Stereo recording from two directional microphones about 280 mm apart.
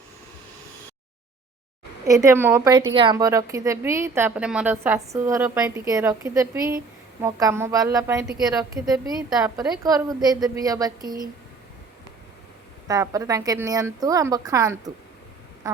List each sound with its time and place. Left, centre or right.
2.0 s a woman's voice: centre
11.0 s speech: right
12.9 s a woman's voice: centre